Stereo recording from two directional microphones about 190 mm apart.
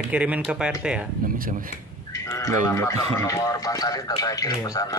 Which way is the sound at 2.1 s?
15° left (ahead or behind).